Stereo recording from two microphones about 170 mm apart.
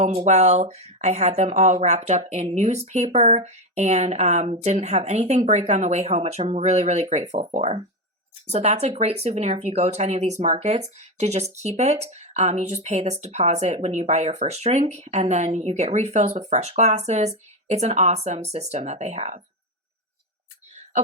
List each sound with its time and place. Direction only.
0.0 s speech: 40° right (ahead or behind)